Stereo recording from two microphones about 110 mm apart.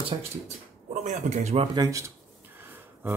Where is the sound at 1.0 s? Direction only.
90° right.